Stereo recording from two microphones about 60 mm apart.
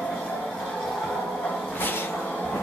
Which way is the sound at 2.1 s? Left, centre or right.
Left.